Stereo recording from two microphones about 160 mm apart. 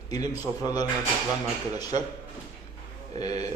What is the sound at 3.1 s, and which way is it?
Speech, 25° left (ahead or behind).